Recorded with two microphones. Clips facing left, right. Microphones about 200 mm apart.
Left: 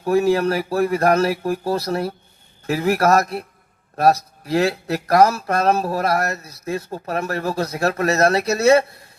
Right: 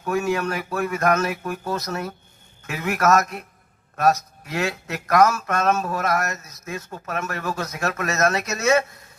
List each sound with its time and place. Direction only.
0.0 s speech: 35° left (ahead or behind)